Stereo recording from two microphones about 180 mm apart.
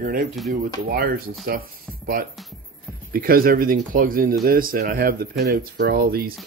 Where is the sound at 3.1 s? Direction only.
55° right (ahead or behind).